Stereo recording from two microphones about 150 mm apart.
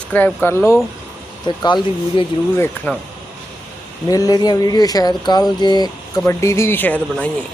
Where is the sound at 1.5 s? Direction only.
30° left (ahead or behind).